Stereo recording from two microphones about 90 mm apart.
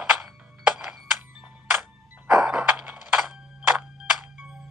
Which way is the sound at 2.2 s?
10° right (ahead or behind).